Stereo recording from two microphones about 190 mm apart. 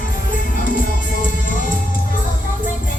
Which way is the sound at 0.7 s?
45° left (ahead or behind).